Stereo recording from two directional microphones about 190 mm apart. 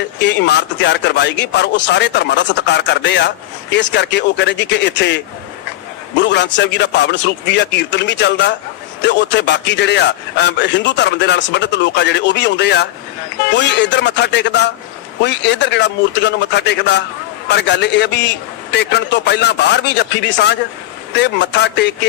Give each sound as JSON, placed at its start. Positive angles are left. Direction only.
{"t": 0.2, "sound": "a man's voice", "side_deg": 65}